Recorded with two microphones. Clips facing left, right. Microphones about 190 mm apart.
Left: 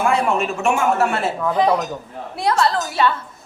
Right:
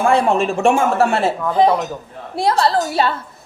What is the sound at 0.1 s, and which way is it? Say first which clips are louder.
A woman's voice: right 4 dB; 30° right (ahead or behind).